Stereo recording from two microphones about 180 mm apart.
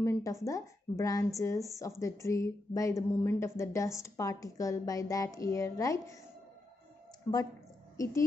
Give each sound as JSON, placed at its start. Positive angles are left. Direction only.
{"t": 0.0, "sound": "a woman's voice", "side_deg": 15}
{"t": 7.3, "sound": "a woman's voice", "side_deg": 15}